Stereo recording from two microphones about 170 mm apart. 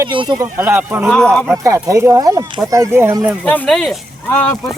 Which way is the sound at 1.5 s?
20° right (ahead or behind).